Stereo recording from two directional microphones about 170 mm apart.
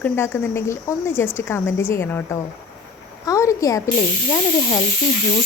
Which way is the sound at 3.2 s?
20° left (ahead or behind).